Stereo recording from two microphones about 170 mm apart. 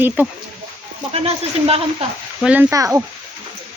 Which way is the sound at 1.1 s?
35° right (ahead or behind).